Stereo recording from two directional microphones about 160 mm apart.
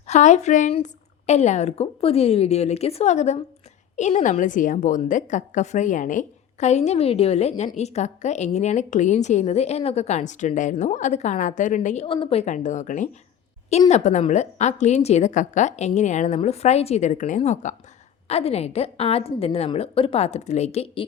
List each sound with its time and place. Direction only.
0.1 s a woman's voice: 45° left (ahead or behind)
12.0 s a woman's voice: 35° left (ahead or behind)